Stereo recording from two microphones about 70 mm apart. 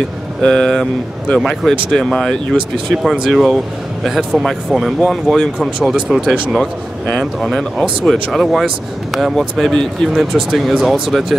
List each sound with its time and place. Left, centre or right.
0.4 s speech: centre